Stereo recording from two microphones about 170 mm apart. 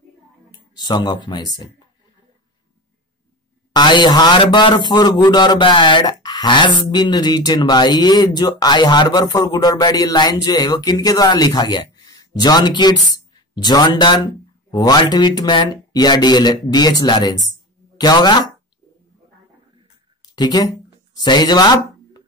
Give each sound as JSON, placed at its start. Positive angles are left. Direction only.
{"t": 0.7, "sound": "a man's voice", "side_deg": 25}
{"t": 3.7, "sound": "a man's voice", "side_deg": 25}
{"t": 20.3, "sound": "a man's voice", "side_deg": 25}